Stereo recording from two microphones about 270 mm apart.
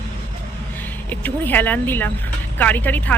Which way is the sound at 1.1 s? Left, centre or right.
Centre.